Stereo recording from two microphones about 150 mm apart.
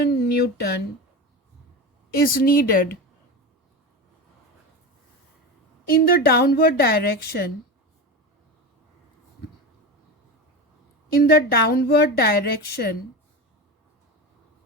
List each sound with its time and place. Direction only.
0.2 s a sound: 90° left
2.1 s a woman's voice: 75° left (ahead or behind)
5.9 s a woman's voice: 90° left
11.2 s a woman's voice: 90° left